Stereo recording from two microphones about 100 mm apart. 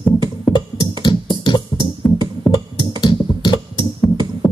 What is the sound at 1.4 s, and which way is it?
Music, 50° left (ahead or behind).